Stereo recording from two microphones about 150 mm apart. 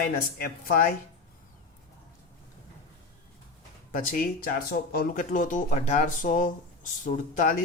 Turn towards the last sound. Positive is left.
turn(degrees=60)  # may be behind; listen again after turning